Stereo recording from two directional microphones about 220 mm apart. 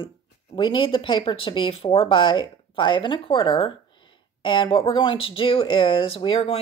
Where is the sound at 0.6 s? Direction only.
25° left (ahead or behind).